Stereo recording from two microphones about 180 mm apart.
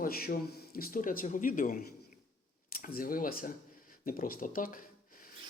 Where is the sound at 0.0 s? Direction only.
55° left (ahead or behind).